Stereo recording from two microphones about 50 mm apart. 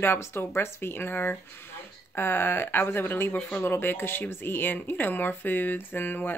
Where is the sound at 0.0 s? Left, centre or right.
Left.